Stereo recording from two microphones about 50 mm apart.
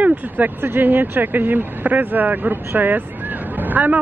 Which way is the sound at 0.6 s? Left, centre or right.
Right.